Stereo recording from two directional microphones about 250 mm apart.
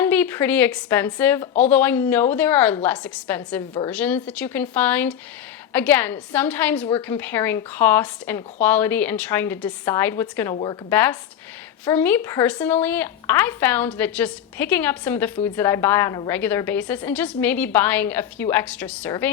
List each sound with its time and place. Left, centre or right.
0.0 s speech: centre